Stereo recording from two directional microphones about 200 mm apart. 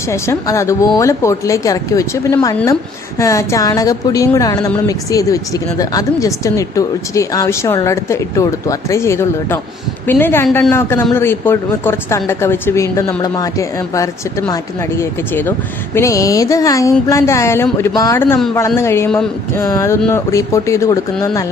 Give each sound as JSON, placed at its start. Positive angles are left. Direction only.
{"t": 0.1, "sound": "a woman's voice", "side_deg": 15}